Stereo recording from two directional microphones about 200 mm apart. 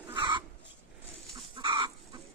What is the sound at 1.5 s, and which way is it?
Chicken, 25° right (ahead or behind).